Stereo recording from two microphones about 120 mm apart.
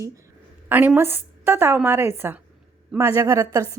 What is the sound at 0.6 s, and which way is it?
A woman's voice, 15° right (ahead or behind).